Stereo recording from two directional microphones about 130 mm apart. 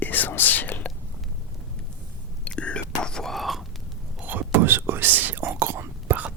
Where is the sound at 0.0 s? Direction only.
15° left (ahead or behind).